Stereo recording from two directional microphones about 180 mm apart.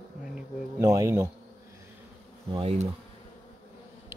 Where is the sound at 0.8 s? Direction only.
20° right (ahead or behind).